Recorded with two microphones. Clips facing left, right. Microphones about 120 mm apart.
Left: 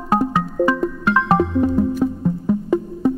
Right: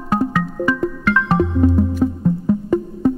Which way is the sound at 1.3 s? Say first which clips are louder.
Right 1 dB; centre (ahead or behind).